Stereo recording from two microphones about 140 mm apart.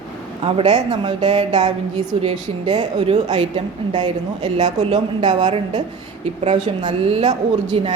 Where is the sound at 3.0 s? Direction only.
55° right (ahead or behind).